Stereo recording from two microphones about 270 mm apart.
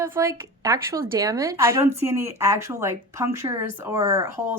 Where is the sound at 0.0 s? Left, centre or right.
Centre.